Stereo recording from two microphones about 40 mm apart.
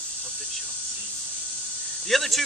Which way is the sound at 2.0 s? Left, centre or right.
Centre.